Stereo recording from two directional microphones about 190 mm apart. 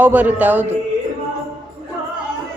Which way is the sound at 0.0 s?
10° right (ahead or behind).